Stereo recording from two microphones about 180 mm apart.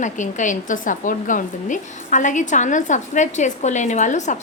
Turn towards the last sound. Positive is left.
turn(degrees=40)  # may be behind; listen again after turning